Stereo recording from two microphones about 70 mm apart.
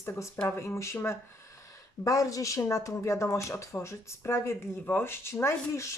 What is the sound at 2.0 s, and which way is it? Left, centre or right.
Speech, left.